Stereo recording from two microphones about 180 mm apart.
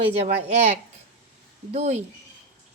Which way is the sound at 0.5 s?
35° right (ahead or behind).